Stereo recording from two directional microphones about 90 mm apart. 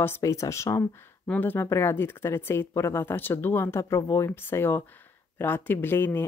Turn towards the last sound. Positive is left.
turn(degrees=25)  # may be behind; listen again after turning